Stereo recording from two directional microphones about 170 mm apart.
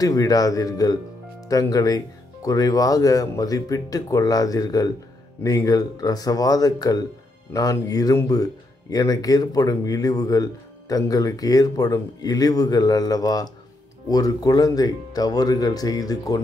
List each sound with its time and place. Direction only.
0.0 s speech: 20° left (ahead or behind)